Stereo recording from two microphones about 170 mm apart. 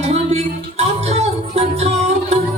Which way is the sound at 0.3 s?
40° right (ahead or behind).